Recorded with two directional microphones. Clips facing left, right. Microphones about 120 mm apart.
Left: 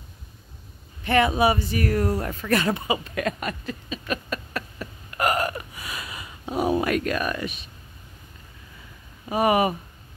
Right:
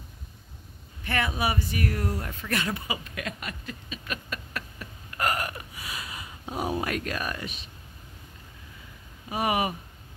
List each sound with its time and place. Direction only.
1.0 s speech: 25° left (ahead or behind)
1.8 s speech: 45° left (ahead or behind)
2.0 s speech: 80° left
3.2 s a sound: 45° left (ahead or behind)
5.1 s hiccup: 20° left (ahead or behind)
5.5 s a sound: 55° left (ahead or behind)
9.3 s speech: 45° left (ahead or behind)